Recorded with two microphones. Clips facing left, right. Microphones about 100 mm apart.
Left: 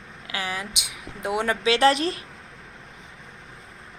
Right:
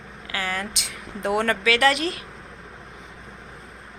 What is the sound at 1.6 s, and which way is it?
Speech, 30° left (ahead or behind).